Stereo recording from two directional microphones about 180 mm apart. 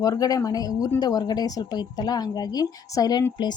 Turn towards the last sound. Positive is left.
turn(degrees=25)  # may be behind; listen again after turning